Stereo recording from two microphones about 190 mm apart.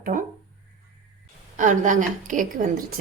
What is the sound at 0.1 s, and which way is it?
Speech, 45° right (ahead or behind).